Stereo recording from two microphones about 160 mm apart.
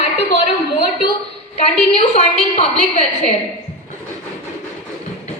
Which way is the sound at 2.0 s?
40° left (ahead or behind).